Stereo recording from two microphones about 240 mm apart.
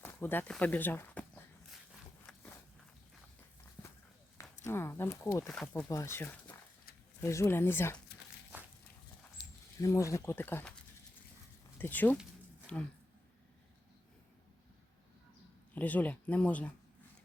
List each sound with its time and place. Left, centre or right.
0.0 s speech: centre
2.2 s a sound: centre
4.6 s speech: centre
8.5 s walk: centre
9.4 s keys jangling: left
9.8 s speech: centre
11.8 s speech: centre
15.7 s speech: centre